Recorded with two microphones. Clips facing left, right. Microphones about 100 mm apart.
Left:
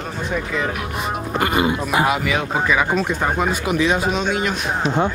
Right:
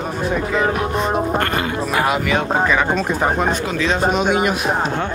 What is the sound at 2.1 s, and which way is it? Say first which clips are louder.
Speech: right 2 dB; 5° left (ahead or behind).